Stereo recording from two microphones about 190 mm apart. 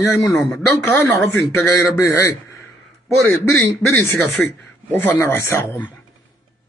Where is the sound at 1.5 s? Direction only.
15° left (ahead or behind).